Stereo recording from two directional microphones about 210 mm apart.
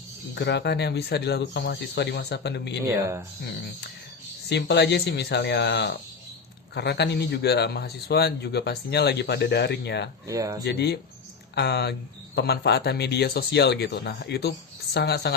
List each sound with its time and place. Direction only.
0.3 s a man's voice: 55° left (ahead or behind)
2.8 s speech: 15° right (ahead or behind)
4.4 s a man's voice: 55° left (ahead or behind)
10.2 s speech: 15° right (ahead or behind)
10.6 s a man's voice: 50° left (ahead or behind)